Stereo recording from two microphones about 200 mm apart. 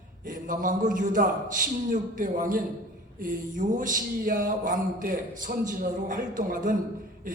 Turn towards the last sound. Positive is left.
turn(degrees=-40)  # may be behind; listen again after turning